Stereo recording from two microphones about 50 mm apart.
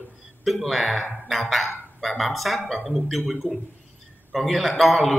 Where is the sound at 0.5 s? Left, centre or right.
Centre.